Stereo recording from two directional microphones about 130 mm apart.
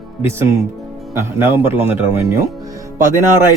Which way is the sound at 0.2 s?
20° right (ahead or behind).